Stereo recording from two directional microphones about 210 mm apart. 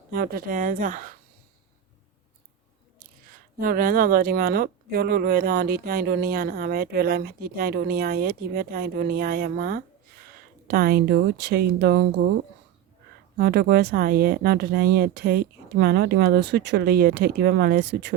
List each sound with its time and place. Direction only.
0.1 s a woman's voice: 45° right (ahead or behind)
3.6 s speech: 45° right (ahead or behind)
13.3 s speech: 50° right (ahead or behind)